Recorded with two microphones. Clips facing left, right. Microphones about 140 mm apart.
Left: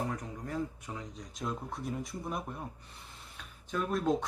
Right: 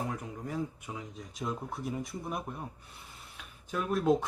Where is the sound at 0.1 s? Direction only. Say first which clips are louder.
Even; 5° right (ahead or behind).